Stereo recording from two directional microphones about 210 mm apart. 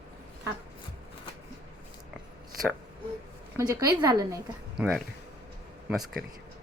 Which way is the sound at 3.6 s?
15° right (ahead or behind).